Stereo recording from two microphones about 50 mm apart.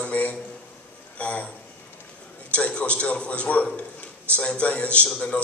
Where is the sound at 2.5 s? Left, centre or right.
Left.